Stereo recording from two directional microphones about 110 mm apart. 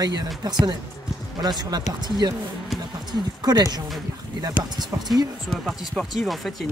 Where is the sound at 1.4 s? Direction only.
40° right (ahead or behind).